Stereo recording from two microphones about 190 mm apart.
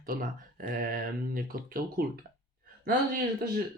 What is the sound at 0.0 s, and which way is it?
Speech, 50° right (ahead or behind).